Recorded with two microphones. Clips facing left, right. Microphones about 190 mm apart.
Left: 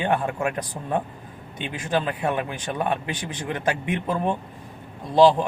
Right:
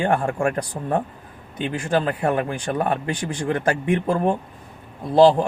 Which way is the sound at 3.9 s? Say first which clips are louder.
Right 7 dB; 45° right (ahead or behind).